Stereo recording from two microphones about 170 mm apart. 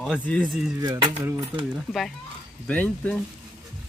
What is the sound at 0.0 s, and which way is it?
Speech, 5° left (ahead or behind).